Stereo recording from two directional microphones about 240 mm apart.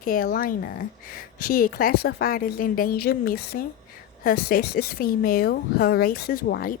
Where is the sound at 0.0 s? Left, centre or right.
Left.